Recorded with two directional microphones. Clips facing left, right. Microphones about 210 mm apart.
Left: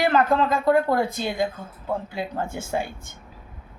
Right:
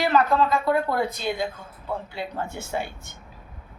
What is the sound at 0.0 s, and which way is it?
A woman's voice, 50° left (ahead or behind).